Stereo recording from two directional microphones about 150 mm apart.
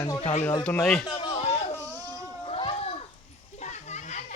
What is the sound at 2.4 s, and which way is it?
Children playing, 40° left (ahead or behind).